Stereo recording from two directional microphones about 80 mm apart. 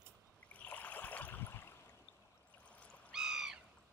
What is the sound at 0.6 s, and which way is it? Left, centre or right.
Stream, left.